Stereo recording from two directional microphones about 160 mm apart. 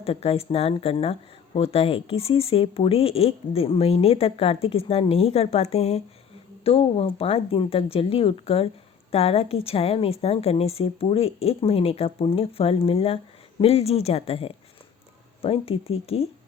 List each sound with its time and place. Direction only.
0.0 s speech: 40° left (ahead or behind)